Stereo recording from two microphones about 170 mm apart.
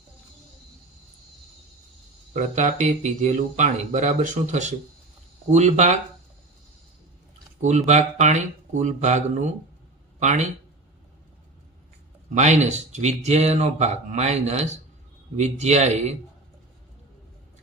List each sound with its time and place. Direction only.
2.3 s speech: 45° right (ahead or behind)
7.9 s speech: 45° right (ahead or behind)
12.3 s speech: 40° right (ahead or behind)